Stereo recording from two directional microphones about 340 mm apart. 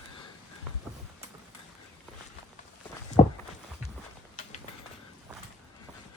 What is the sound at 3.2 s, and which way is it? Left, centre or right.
Walk, left.